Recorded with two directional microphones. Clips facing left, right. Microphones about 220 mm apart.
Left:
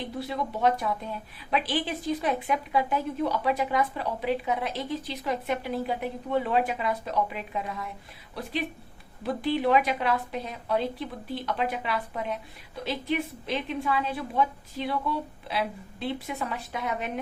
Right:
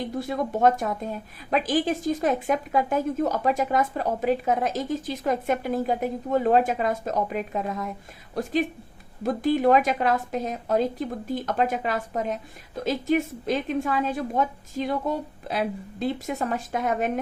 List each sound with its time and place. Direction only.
0.0 s a woman's voice: 45° right (ahead or behind)